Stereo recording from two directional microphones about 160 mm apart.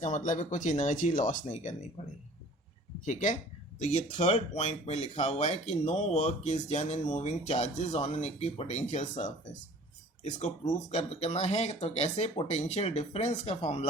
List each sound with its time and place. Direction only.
0.0 s speech: 50° left (ahead or behind)
3.0 s speech: 50° left (ahead or behind)